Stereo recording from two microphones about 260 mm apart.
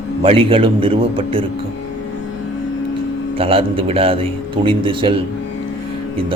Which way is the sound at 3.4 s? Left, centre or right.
Right.